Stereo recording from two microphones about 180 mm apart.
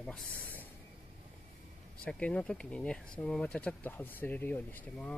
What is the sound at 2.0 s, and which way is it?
Speech, 5° left (ahead or behind).